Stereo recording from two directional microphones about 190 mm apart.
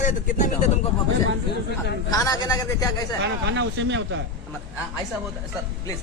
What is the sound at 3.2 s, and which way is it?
Speech, 70° right (ahead or behind).